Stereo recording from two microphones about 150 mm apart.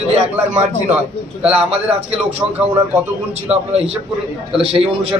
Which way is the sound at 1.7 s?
40° right (ahead or behind).